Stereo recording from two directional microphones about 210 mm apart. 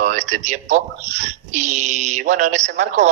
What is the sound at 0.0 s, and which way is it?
A man's voice, 35° right (ahead or behind).